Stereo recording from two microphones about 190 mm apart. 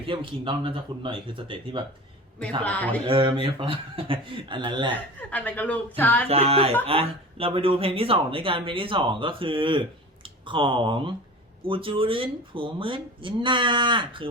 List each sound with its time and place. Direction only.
0.0 s speech: 30° right (ahead or behind)
2.6 s speech: 10° left (ahead or behind)
3.1 s speech: 25° right (ahead or behind)
5.3 s speech: 10° left (ahead or behind)
6.2 s speech: 30° right (ahead or behind)